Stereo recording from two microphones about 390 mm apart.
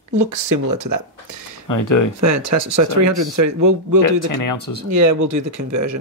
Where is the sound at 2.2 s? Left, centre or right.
Right.